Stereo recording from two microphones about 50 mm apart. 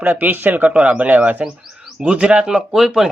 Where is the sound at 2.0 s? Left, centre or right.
Right; by 3.0 s centre.